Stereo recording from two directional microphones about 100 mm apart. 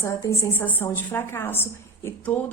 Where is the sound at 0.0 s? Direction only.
30° left (ahead or behind).